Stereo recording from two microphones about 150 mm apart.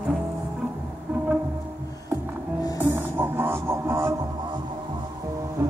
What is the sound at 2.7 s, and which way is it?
Music, 15° right (ahead or behind).